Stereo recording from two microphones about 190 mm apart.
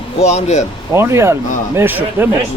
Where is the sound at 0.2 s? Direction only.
35° left (ahead or behind).